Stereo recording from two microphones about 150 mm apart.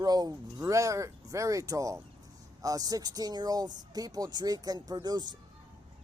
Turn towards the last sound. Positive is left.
turn(degrees=-30)  # may be behind; listen again after turning